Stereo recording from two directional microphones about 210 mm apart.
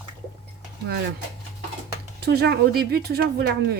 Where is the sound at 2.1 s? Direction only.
50° right (ahead or behind).